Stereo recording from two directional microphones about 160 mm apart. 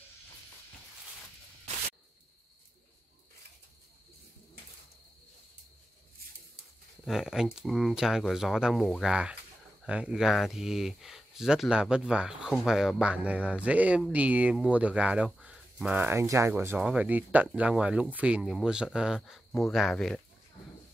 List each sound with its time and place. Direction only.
7.1 s speech: 5° right (ahead or behind)